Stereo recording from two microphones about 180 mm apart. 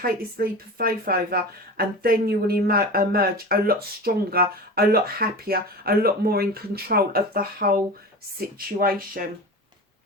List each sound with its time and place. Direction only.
0.0 s speech: 55° right (ahead or behind)